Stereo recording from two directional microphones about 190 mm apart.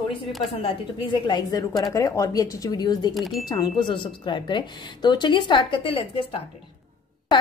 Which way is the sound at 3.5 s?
25° left (ahead or behind).